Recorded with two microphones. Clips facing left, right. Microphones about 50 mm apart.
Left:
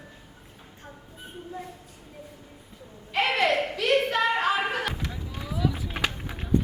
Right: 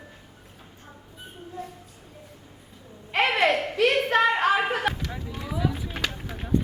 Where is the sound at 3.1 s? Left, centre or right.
Right.